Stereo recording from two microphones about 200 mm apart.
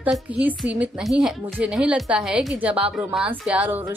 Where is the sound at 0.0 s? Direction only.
5° right (ahead or behind).